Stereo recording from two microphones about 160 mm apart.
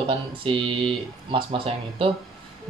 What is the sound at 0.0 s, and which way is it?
Speech, 35° right (ahead or behind).